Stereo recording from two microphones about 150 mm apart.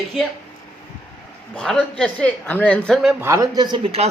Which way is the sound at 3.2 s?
20° right (ahead or behind).